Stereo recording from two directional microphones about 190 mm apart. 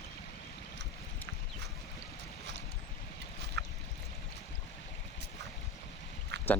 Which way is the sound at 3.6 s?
65° right (ahead or behind).